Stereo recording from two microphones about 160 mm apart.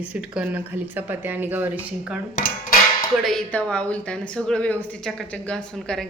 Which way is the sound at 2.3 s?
60° left (ahead or behind).